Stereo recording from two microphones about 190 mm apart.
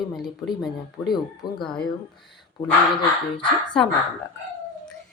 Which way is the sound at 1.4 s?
20° left (ahead or behind).